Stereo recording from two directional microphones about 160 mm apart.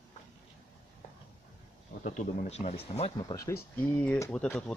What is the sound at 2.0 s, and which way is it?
Speech, 50° left (ahead or behind).